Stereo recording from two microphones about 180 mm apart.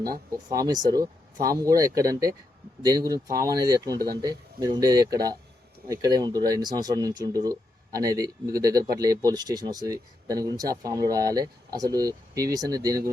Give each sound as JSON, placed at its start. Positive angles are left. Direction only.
{"t": 0.3, "sound": "speech", "side_deg": -20}